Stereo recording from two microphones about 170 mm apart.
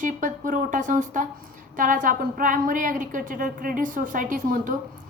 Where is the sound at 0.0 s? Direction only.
50° right (ahead or behind).